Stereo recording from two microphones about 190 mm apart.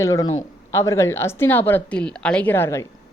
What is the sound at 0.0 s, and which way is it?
A woman's voice, 15° left (ahead or behind).